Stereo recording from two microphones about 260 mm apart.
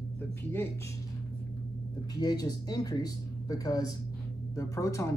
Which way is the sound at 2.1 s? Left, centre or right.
Centre.